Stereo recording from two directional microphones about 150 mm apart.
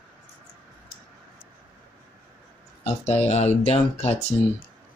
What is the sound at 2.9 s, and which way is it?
Speech, 45° left (ahead or behind).